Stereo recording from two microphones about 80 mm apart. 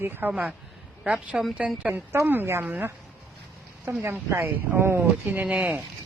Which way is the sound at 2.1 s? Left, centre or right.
Right.